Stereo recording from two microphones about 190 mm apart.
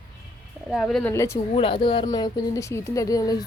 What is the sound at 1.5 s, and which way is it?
Speech, 30° left (ahead or behind).